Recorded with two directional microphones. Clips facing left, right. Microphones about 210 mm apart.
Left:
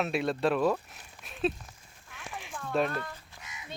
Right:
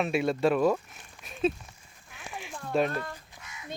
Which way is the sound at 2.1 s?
Centre (ahead or behind).